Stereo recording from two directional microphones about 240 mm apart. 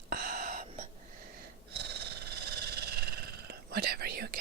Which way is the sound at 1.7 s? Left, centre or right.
Right.